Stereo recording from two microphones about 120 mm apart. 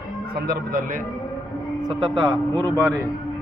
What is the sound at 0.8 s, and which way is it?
Speech, 90° right.